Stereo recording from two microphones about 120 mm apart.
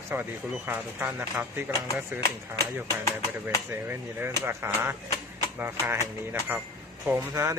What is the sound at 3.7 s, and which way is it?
Speech, 20° right (ahead or behind).